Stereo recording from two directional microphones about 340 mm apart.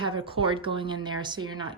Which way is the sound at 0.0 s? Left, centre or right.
Centre.